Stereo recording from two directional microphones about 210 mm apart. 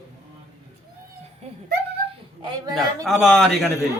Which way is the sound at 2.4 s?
20° right (ahead or behind).